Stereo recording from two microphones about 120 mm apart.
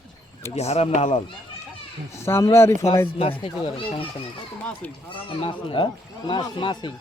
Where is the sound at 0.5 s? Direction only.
60° left (ahead or behind).